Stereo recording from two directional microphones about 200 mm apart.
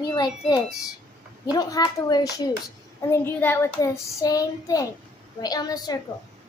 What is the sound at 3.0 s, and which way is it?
Child singing, 10° left (ahead or behind).